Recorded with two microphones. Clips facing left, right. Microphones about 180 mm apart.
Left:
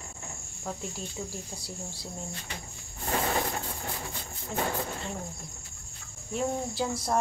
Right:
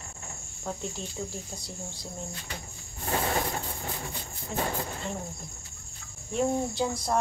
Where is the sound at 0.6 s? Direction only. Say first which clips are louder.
Right 2 dB; centre (ahead or behind).